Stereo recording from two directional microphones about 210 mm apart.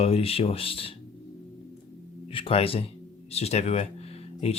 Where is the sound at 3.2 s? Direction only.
30° left (ahead or behind).